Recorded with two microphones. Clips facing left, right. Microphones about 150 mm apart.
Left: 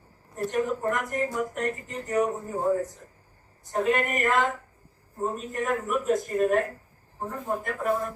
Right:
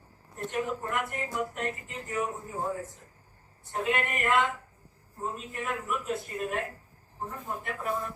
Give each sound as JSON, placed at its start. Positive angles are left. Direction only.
{"t": 0.3, "sound": "speech", "side_deg": 40}